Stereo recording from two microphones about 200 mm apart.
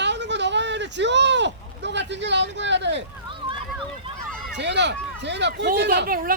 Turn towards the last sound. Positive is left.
turn(degrees=-45)  # may be behind; listen again after turning